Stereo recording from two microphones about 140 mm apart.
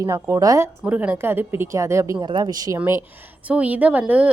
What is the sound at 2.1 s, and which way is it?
Speech, 30° right (ahead or behind).